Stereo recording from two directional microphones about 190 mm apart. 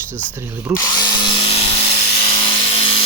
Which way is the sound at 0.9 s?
25° left (ahead or behind).